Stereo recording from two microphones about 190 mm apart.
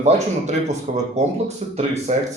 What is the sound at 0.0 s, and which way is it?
Speech, 35° right (ahead or behind).